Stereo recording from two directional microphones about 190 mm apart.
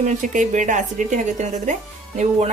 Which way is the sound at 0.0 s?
40° right (ahead or behind).